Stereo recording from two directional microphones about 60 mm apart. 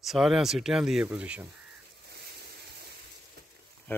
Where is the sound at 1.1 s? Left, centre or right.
Right.